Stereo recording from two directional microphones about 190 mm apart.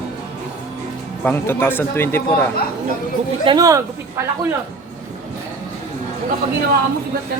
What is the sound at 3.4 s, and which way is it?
Speech, 20° right (ahead or behind).